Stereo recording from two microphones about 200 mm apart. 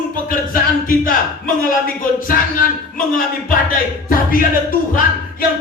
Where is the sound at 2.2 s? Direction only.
45° left (ahead or behind).